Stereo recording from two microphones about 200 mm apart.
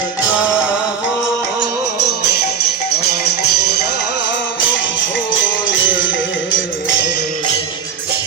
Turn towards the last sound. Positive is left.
turn(degrees=70)  # may be behind; listen again after turning